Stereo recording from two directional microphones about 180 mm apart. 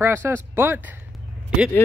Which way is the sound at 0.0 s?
15° right (ahead or behind).